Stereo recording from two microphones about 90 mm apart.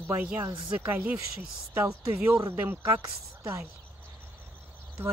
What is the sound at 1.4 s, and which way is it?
Speech, 35° right (ahead or behind).